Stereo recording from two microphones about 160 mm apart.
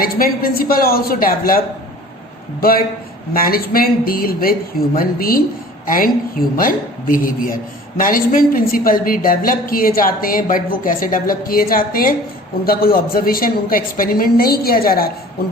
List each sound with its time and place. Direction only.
0.0 s a woman's voice: 65° left (ahead or behind)